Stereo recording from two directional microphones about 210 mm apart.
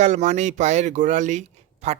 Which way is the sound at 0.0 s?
35° right (ahead or behind).